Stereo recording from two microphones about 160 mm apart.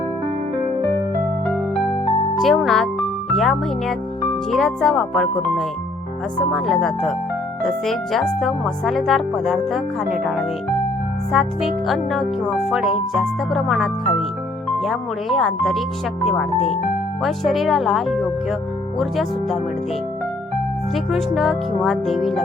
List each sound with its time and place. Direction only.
1.5 s music: centre (ahead or behind)
4.5 s speech: centre (ahead or behind)
17.2 s speech: centre (ahead or behind)
20.9 s speech: centre (ahead or behind)